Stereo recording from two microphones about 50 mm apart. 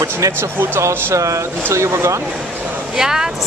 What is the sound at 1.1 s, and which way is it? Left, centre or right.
Speech, right.